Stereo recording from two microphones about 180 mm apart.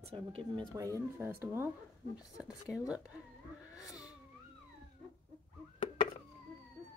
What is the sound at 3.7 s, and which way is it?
Cat, 20° left (ahead or behind).